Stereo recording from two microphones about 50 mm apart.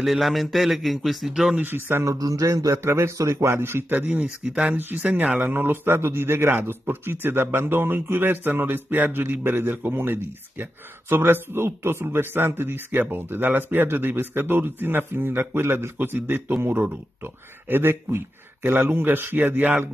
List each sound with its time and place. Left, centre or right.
0.0 s a man's voice: centre
1.6 s speech: right
2.0 s speech: right
3.9 s a man's voice: right
5.0 s speech: right
5.4 s a man's voice: right
16.0 s a man's voice: right